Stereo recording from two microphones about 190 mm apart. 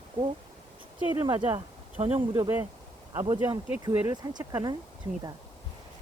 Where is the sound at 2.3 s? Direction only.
20° right (ahead or behind).